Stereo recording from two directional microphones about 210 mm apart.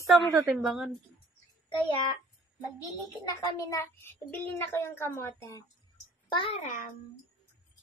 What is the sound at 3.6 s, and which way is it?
Speech, 15° left (ahead or behind).